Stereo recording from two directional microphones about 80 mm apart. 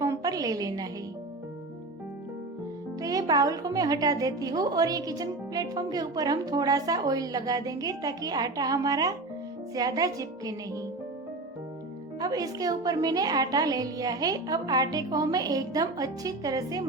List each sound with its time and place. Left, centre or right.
0.0 s a sound: right
3.0 s a woman's voice: right
12.2 s a woman's voice: right